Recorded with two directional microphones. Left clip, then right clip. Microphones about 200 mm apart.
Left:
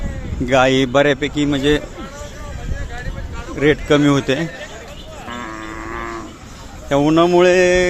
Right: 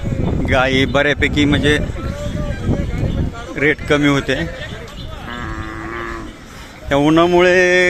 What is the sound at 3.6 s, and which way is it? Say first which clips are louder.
Speech: left 1 dB; 5° left (ahead or behind).